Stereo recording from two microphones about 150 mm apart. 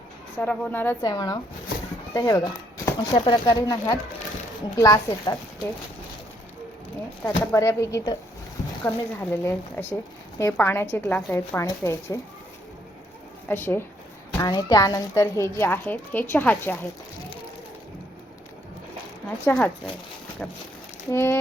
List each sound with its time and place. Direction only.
0.3 s a woman's voice: 10° left (ahead or behind)
1.0 s speech: 25° left (ahead or behind)
7.3 s a woman's voice: 20° left (ahead or behind)
13.5 s a woman's voice: 15° left (ahead or behind)
19.5 s a woman's voice: 10° left (ahead or behind)
21.1 s a woman's voice: 15° left (ahead or behind)